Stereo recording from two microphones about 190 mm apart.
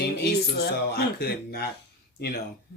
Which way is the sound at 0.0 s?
60° left (ahead or behind).